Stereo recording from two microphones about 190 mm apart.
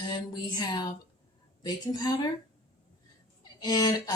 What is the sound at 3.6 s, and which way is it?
Speech, 20° left (ahead or behind).